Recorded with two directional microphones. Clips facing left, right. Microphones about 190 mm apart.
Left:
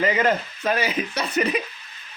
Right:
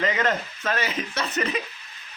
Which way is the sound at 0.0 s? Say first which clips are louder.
Left 4 dB; 10° left (ahead or behind).